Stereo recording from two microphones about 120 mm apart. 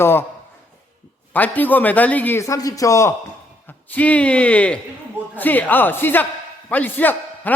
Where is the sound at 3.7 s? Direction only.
15° left (ahead or behind).